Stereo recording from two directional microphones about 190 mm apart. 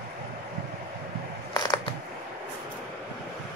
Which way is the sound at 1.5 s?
20° left (ahead or behind).